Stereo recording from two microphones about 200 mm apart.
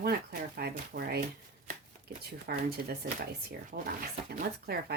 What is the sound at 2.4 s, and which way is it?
Speech, 50° right (ahead or behind).